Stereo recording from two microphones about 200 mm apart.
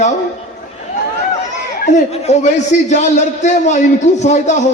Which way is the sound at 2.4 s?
35° left (ahead or behind).